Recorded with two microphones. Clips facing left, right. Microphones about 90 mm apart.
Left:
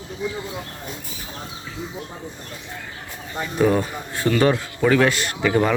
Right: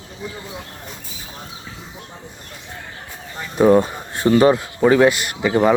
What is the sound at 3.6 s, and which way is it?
Speech, 25° right (ahead or behind).